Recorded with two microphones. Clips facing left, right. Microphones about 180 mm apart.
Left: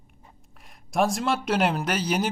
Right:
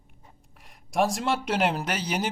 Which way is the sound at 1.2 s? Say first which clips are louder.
Left 2 dB; 20° right (ahead or behind).